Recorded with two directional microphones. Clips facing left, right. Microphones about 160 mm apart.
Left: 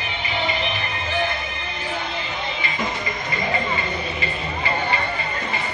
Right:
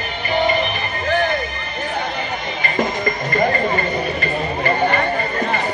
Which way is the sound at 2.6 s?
50° right (ahead or behind).